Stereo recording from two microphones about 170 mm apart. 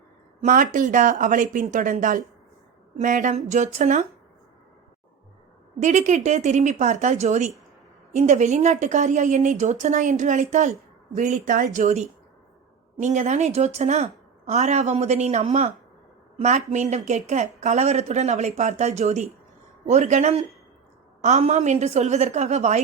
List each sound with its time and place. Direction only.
0.4 s a woman's voice: 50° right (ahead or behind)
5.8 s a woman's voice: 45° right (ahead or behind)